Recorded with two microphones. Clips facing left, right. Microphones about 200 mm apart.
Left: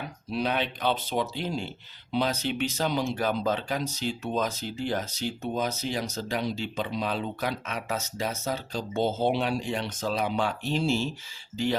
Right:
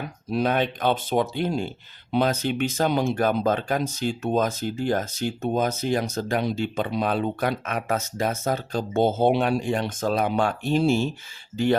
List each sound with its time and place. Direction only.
0.3 s speech: 50° right (ahead or behind)